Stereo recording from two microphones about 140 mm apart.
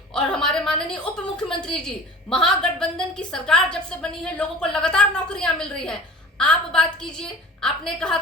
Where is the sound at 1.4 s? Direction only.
5° left (ahead or behind).